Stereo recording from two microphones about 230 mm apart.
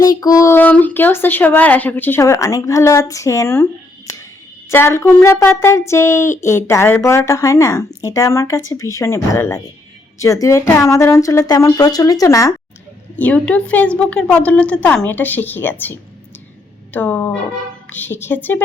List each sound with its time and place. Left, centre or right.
0.0 s speech: centre